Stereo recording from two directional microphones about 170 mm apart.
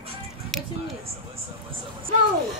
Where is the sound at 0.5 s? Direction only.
Centre (ahead or behind).